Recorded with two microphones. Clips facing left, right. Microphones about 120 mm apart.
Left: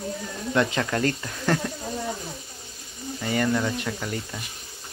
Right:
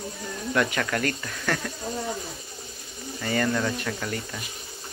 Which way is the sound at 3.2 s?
15° left (ahead or behind).